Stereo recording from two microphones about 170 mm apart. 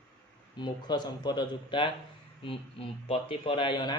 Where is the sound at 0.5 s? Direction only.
25° left (ahead or behind).